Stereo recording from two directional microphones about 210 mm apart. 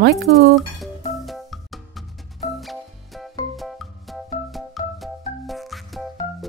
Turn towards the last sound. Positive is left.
turn(degrees=0)  # may be behind; listen again after turning